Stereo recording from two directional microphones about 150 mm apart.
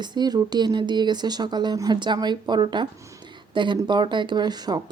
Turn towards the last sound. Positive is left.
turn(degrees=-25)  # may be behind; listen again after turning